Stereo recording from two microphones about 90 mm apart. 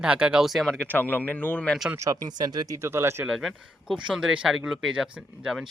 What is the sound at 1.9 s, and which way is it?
Speech, 35° right (ahead or behind).